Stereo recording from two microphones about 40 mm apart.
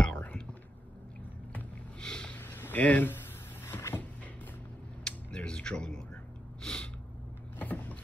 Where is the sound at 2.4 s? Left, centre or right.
Left.